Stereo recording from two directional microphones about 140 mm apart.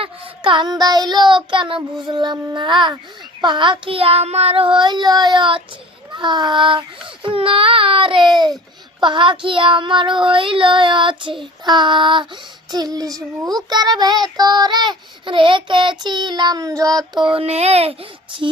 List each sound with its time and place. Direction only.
0.0 s child singing: 35° right (ahead or behind)
6.1 s speech: 30° right (ahead or behind)
7.3 s child singing: 40° right (ahead or behind)
12.7 s a child's voice: 30° right (ahead or behind)
14.3 s child singing: 30° right (ahead or behind); by 17.9 s 45° right (ahead or behind)